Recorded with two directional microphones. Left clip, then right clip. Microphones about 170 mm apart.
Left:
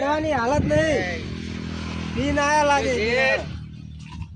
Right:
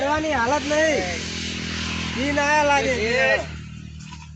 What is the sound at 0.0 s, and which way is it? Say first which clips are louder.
Vehicle: right 1 dB; 40° left (ahead or behind).